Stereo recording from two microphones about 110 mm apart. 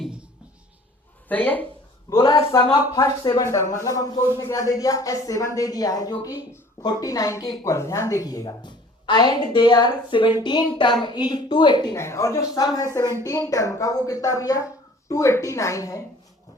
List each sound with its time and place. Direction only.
1.3 s speech: 15° left (ahead or behind)
2.0 s a woman's voice: 35° left (ahead or behind)
11.9 s a woman's voice: 25° left (ahead or behind)